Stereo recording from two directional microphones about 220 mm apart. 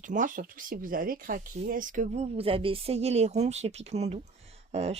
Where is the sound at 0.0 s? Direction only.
35° right (ahead or behind).